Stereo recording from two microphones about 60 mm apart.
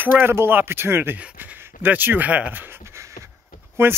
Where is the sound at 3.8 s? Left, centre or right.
Right.